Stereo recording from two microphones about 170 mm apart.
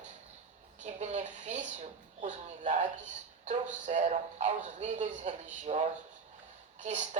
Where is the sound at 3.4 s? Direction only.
45° right (ahead or behind).